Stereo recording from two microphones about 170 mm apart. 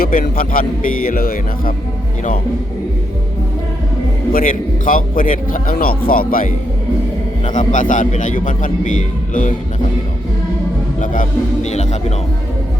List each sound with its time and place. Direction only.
0.0 s a man's voice: 55° left (ahead or behind)
4.3 s a man's voice: 55° left (ahead or behind)
11.0 s a man's voice: 50° left (ahead or behind)